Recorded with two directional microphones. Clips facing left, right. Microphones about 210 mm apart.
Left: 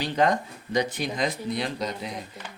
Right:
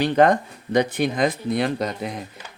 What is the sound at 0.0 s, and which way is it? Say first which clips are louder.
A man's voice: right 7 dB; 60° right (ahead or behind).